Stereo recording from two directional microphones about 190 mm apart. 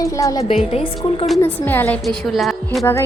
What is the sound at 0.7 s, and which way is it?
Speech, 30° left (ahead or behind).